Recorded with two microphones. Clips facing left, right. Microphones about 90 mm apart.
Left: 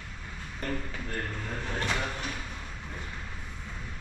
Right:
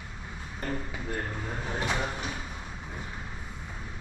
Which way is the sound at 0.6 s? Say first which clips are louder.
Even; 15° right (ahead or behind).